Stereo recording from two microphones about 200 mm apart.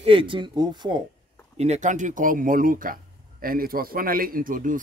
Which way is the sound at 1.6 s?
35° right (ahead or behind).